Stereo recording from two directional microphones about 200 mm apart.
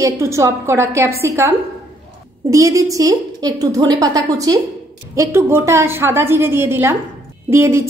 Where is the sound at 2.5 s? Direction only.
15° right (ahead or behind).